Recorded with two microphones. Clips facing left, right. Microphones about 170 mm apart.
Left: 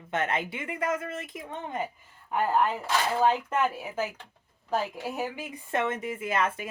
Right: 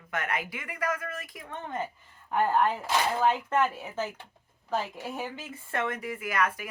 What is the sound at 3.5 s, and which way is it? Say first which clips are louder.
Speech: even; 10° left (ahead or behind).